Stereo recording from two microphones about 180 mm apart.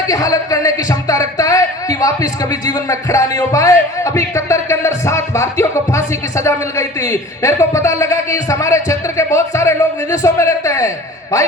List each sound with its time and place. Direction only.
0.1 s speech: 20° left (ahead or behind)